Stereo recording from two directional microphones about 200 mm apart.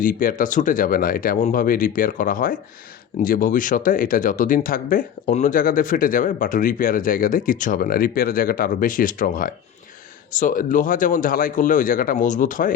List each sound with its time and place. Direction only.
0.0 s speech: 45° left (ahead or behind)